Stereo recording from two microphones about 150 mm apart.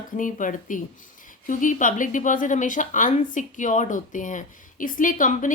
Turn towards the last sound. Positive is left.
turn(degrees=60)  # may be behind; listen again after turning